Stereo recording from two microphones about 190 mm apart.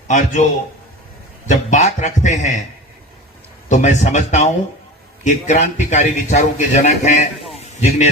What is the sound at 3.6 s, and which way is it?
A man's voice, 40° left (ahead or behind).